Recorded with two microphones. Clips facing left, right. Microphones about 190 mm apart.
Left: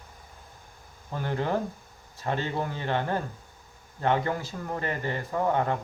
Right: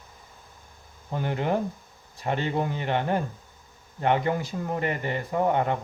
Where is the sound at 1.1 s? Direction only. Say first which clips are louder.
Right 2 dB; 15° right (ahead or behind).